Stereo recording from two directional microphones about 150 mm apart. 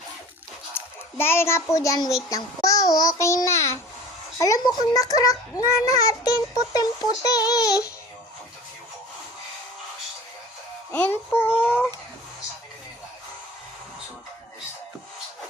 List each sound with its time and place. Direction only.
0.8 s a sound: 15° left (ahead or behind)
1.2 s a child's voice: 15° left (ahead or behind)
10.9 s a child's voice: 15° left (ahead or behind)